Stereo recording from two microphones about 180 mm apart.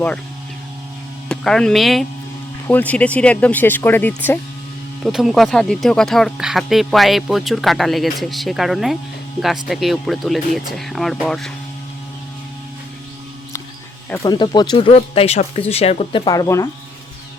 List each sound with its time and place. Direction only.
1.3 s speech: 5° left (ahead or behind)
5.0 s speech: centre (ahead or behind)
14.1 s speech: 20° left (ahead or behind)